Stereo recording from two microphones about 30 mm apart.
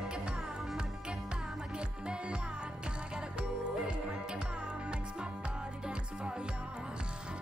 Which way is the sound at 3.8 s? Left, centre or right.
Right.